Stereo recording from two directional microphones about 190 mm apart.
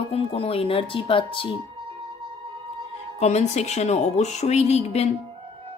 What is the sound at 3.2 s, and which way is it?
Music, 35° left (ahead or behind).